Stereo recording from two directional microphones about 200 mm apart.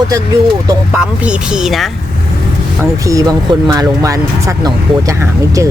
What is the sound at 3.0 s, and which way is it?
Speech, 15° right (ahead or behind).